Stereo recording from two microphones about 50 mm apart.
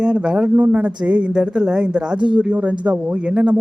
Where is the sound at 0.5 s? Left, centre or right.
Right.